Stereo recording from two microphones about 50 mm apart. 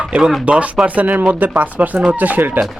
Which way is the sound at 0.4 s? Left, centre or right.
Right.